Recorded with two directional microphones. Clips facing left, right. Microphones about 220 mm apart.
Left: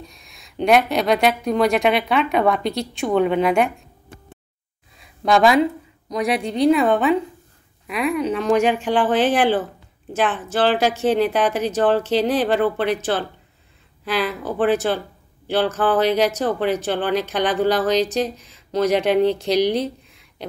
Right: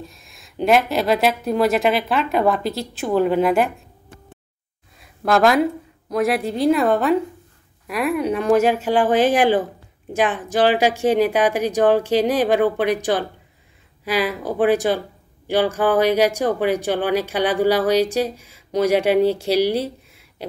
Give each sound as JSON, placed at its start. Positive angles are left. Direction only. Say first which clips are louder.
{"t": 0.0, "sound": "speech", "louder": "right 3 dB", "side_deg": 0}
{"t": 5.2, "sound": "speech", "louder": "even", "side_deg": 0}